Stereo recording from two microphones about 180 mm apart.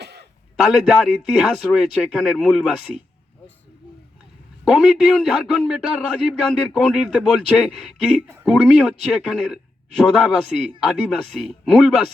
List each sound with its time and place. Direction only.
0.0 s a sound: 70° right (ahead or behind)
0.5 s a man's voice: centre (ahead or behind)
4.6 s a man's voice: centre (ahead or behind)